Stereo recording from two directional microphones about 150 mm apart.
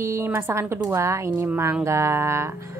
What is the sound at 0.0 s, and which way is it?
A woman's voice, 15° right (ahead or behind).